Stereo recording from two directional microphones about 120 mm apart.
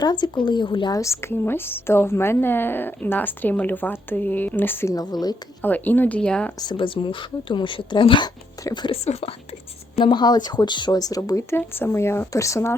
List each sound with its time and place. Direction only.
0.0 s speech: 40° left (ahead or behind)
0.9 s a woman's voice: 25° left (ahead or behind)
4.9 s speech: 35° left (ahead or behind)
5.6 s a woman's voice: 15° left (ahead or behind)
6.6 s speech: 40° left (ahead or behind)
10.0 s speech: 40° left (ahead or behind); by 12.7 s 25° left (ahead or behind)